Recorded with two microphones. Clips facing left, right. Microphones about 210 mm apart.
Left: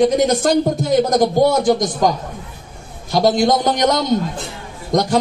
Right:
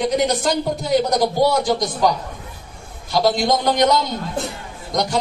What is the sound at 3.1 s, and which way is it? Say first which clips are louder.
Speech: left 3 dB; 45° left (ahead or behind).